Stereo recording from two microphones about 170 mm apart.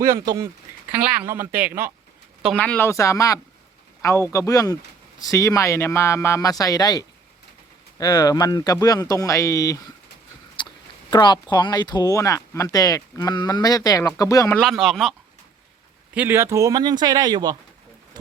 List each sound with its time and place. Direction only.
0.0 s a man's voice: 20° right (ahead or behind)
2.6 s speech: 10° left (ahead or behind)
10.6 s a sound: 30° left (ahead or behind)
11.1 s speech: 25° left (ahead or behind)
14.5 s speech: centre (ahead or behind)
16.1 s a man's voice: 10° right (ahead or behind)